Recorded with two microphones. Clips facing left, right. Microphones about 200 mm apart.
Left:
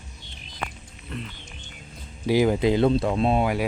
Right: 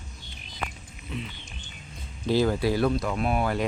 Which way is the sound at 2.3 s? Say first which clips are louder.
Left 3 dB; 15° left (ahead or behind).